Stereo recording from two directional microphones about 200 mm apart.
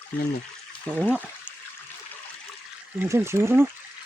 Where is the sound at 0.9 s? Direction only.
5° right (ahead or behind).